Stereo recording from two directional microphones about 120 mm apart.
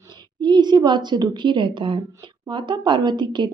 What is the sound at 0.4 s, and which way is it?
A woman's voice, 35° right (ahead or behind).